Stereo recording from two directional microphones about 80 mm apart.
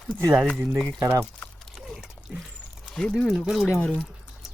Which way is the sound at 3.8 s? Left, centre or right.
Centre.